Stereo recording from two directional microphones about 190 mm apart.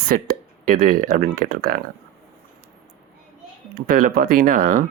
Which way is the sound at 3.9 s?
50° right (ahead or behind).